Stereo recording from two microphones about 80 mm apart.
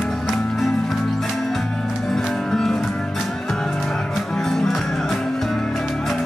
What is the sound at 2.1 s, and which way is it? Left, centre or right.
Music, centre.